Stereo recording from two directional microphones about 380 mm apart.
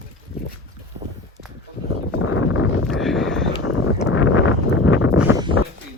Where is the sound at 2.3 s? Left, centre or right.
Left.